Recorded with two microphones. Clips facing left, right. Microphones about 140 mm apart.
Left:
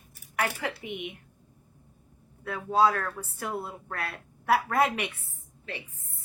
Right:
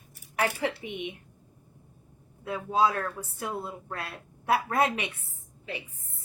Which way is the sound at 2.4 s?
20° right (ahead or behind).